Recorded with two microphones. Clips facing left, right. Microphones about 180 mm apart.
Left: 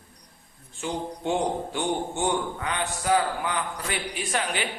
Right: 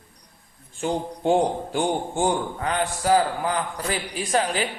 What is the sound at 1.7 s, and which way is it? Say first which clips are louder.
A man's voice: right 4 dB; 45° right (ahead or behind).